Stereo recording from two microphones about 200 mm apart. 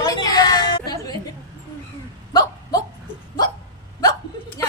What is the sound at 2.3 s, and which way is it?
Hiccup, 20° left (ahead or behind).